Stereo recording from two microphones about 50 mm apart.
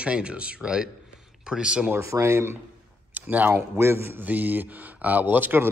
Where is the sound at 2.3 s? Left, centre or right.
Right.